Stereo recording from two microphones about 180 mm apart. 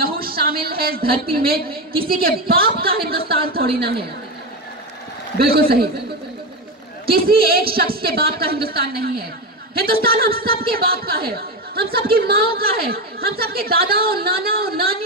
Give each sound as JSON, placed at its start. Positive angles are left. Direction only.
{"t": 0.0, "sound": "a sound", "side_deg": -55}
{"t": 1.3, "sound": "a woman's voice", "side_deg": -55}
{"t": 5.4, "sound": "a woman's voice", "side_deg": -55}
{"t": 7.1, "sound": "a woman's voice", "side_deg": -55}